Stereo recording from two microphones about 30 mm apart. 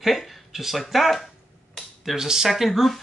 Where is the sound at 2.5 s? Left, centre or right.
Centre.